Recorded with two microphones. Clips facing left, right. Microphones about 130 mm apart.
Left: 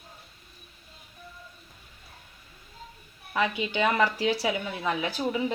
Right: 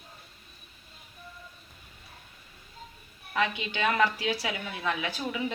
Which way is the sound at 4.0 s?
30° left (ahead or behind).